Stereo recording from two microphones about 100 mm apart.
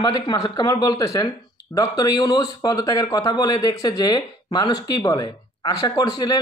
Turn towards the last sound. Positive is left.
turn(degrees=40)  # may be behind; listen again after turning